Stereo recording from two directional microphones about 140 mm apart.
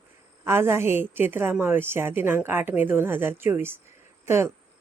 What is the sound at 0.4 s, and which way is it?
A woman's voice, 15° right (ahead or behind).